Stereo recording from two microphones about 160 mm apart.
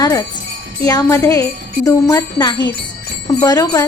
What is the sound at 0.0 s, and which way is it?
Wind chime, 25° left (ahead or behind).